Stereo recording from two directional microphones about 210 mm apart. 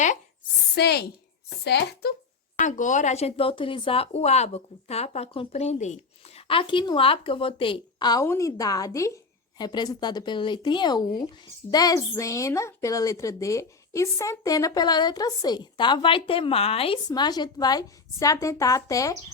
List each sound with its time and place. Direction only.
0.8 s speech: 50° left (ahead or behind)
2.6 s a woman's voice: 35° left (ahead or behind); by 19.1 s 15° left (ahead or behind)